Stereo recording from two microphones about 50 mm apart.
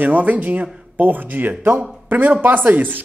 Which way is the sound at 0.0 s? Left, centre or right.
Right.